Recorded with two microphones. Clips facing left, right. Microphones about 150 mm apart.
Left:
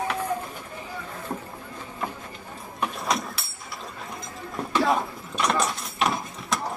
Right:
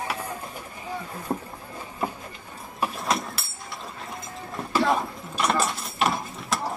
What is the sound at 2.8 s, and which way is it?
Vehicle, centre (ahead or behind).